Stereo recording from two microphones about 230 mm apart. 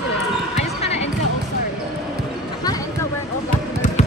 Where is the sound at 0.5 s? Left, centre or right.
Left.